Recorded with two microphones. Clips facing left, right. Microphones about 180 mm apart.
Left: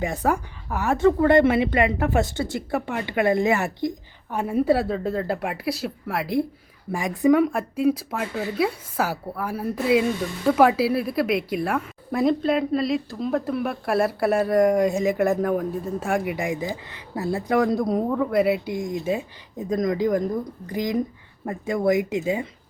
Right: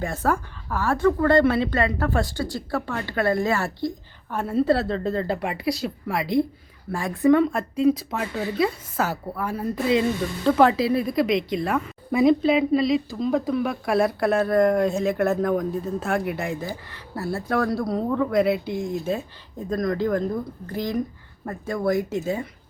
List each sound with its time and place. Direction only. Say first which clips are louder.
0.0 s speech: left 1 dB; 15° left (ahead or behind)
6.9 s speech: even; 15° left (ahead or behind)